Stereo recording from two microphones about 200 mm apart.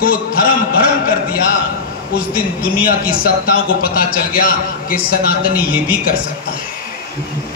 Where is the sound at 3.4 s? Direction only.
50° left (ahead or behind).